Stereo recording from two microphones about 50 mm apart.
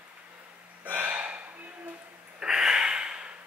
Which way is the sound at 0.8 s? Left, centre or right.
Right.